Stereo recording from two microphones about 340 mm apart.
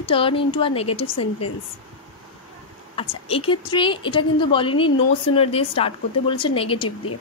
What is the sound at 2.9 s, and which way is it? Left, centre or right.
A woman's voice, centre.